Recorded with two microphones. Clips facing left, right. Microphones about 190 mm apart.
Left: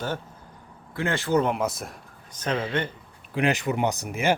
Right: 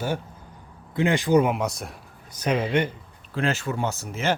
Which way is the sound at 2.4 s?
10° right (ahead or behind).